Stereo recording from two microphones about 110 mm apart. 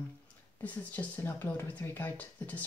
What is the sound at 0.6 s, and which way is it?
Speech, 15° left (ahead or behind).